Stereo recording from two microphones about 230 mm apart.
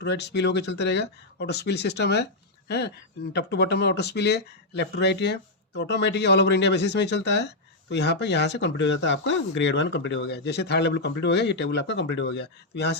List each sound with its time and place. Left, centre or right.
0.0 s speech: left